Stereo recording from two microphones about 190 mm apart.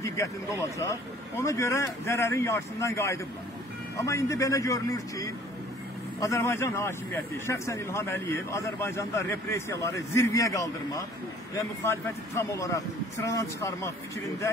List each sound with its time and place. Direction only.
0.0 s a man's voice: 15° left (ahead or behind)